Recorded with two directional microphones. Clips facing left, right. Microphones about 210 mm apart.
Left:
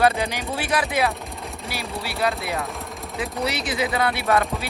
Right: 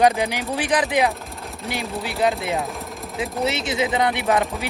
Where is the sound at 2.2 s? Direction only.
20° right (ahead or behind).